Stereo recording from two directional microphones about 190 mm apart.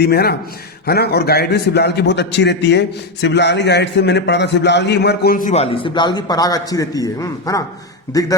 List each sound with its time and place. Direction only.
0.0 s a man's voice: 55° left (ahead or behind)
5.7 s a man's voice: 25° left (ahead or behind)